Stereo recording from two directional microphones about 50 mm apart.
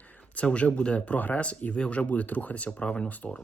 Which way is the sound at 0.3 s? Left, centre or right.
Left.